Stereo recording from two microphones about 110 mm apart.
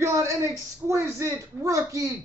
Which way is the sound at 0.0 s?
25° right (ahead or behind).